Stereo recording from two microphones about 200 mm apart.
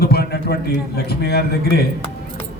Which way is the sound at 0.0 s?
50° left (ahead or behind).